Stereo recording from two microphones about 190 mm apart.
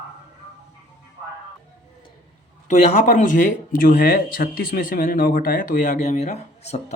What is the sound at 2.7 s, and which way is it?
Speech, 40° left (ahead or behind).